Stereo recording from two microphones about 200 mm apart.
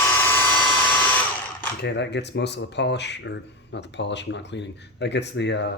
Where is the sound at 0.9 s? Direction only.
10° left (ahead or behind).